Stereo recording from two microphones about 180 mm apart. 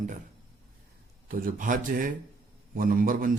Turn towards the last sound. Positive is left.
turn(degrees=-50)  # may be behind; listen again after turning